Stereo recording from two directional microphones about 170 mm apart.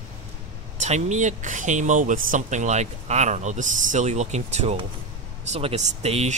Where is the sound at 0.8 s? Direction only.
45° right (ahead or behind).